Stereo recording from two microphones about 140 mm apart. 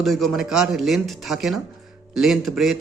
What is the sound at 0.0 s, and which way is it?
A man's voice, centre (ahead or behind).